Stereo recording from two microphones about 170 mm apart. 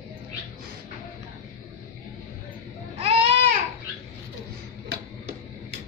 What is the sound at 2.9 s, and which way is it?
Baby cry, 35° right (ahead or behind).